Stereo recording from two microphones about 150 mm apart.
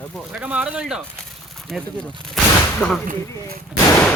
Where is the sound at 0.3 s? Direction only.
5° right (ahead or behind).